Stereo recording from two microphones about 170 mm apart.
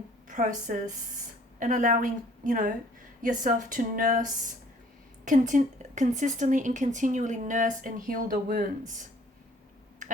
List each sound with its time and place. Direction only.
0.3 s a woman's voice: 50° right (ahead or behind)